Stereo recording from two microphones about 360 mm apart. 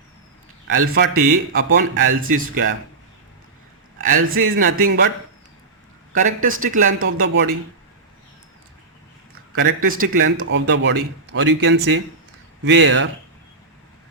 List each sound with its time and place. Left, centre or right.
0.8 s speech: right
4.4 s speech: right
6.1 s speech: right
7.0 s speech: right
9.6 s speech: right
10.2 s speech: right